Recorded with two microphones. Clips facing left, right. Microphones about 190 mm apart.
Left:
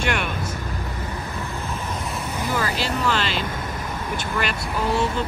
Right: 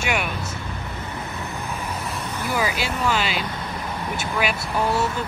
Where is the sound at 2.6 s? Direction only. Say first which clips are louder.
Right 1 dB; 10° right (ahead or behind).